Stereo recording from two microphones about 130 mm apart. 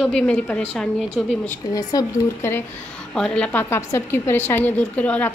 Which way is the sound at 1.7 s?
25° left (ahead or behind).